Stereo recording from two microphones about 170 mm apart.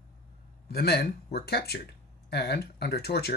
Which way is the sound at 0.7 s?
65° left (ahead or behind).